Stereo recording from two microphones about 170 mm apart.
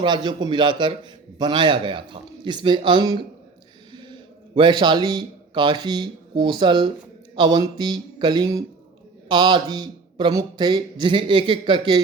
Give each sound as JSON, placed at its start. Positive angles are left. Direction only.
{"t": 0.0, "sound": "a man's voice", "side_deg": -25}